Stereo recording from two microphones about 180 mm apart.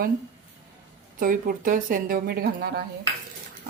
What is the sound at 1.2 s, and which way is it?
Speech, 50° right (ahead or behind).